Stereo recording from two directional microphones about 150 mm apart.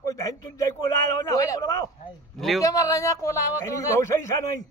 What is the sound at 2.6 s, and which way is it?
A man's voice, 25° left (ahead or behind).